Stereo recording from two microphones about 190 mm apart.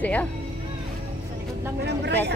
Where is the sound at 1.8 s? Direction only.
65° right (ahead or behind).